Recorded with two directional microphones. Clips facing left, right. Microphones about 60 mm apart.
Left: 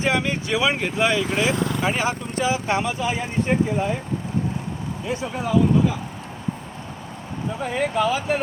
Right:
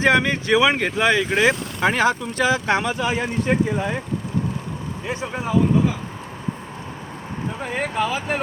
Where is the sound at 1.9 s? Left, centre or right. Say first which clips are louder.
Right 4 dB; right.